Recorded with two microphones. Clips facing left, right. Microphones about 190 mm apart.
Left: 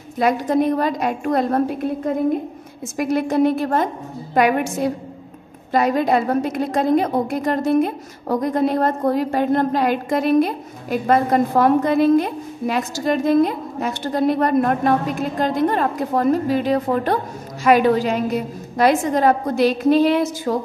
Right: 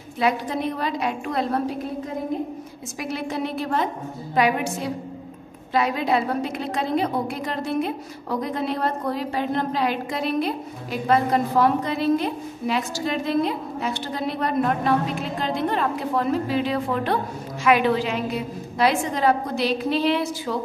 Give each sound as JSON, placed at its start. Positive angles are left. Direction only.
{"t": 0.2, "sound": "a woman's voice", "side_deg": 45}
{"t": 3.0, "sound": "a woman's voice", "side_deg": 50}